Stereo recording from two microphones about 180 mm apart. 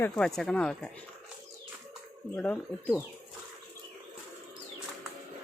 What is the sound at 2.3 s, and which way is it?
Speech, 10° left (ahead or behind).